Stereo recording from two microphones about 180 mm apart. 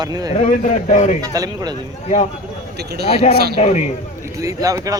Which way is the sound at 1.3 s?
20° right (ahead or behind).